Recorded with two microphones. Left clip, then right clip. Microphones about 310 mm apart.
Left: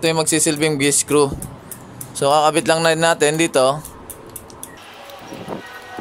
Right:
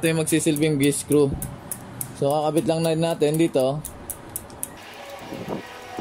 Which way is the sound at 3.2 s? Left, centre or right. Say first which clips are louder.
Left 4 dB; left.